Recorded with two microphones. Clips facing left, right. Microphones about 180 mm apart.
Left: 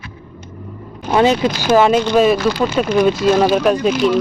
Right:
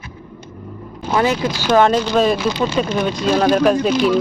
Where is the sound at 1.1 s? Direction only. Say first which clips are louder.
Left 4 dB; 20° left (ahead or behind).